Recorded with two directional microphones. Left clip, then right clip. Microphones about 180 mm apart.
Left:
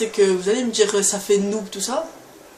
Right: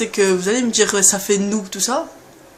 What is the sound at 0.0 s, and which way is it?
Speech, 40° right (ahead or behind).